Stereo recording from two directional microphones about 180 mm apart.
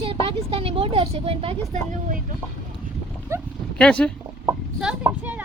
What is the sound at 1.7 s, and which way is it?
Speech, 45° right (ahead or behind).